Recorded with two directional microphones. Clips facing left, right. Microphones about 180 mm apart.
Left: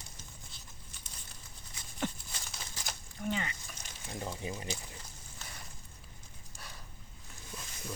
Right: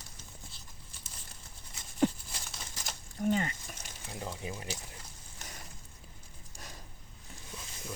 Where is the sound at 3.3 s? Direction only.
40° right (ahead or behind).